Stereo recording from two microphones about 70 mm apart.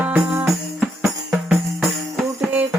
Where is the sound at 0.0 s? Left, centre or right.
Right.